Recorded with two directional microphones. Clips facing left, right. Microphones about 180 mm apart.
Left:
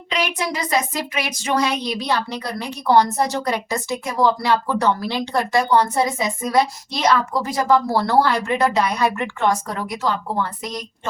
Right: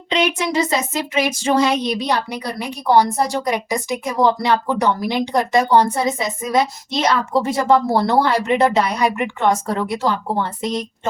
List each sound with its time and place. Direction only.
0.1 s speech: 25° right (ahead or behind)